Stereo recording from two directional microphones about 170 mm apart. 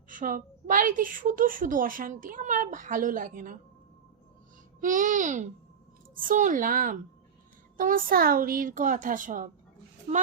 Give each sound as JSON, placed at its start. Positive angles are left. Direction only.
{"t": 0.1, "sound": "a woman's voice", "side_deg": -55}
{"t": 4.8, "sound": "a woman's voice", "side_deg": -50}